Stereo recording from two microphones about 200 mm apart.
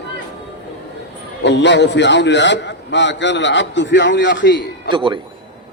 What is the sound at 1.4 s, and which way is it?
A man's voice, 60° left (ahead or behind).